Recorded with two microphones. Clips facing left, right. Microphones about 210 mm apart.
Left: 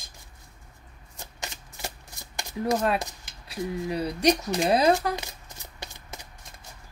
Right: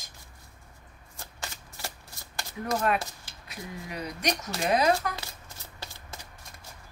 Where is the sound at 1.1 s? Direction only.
20° left (ahead or behind).